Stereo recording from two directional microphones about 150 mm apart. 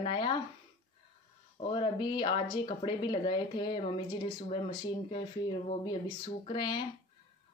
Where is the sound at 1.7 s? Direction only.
35° left (ahead or behind).